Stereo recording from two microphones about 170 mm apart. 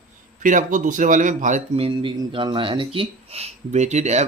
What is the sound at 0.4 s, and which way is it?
Speech, 50° right (ahead or behind).